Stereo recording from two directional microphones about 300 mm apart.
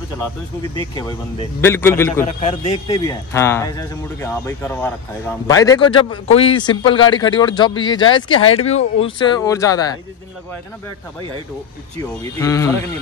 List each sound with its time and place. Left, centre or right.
0.7 s speech: centre
2.2 s speech: centre
12.0 s speech: centre